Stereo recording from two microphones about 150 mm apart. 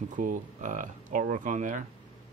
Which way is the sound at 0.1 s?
60° right (ahead or behind).